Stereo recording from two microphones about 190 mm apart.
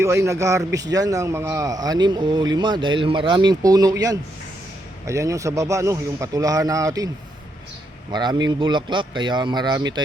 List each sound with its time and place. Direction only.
0.0 s a man's voice: 15° right (ahead or behind)
8.1 s a man's voice: 20° right (ahead or behind)